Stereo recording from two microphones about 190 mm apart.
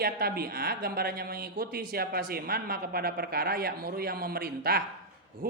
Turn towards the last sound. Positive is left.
turn(degrees=-55)  # may be behind; listen again after turning